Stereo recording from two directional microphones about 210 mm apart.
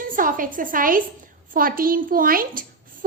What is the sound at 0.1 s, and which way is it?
A woman's voice, 40° right (ahead or behind).